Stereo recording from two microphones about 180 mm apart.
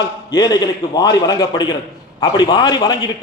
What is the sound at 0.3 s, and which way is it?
A man's voice, 20° left (ahead or behind).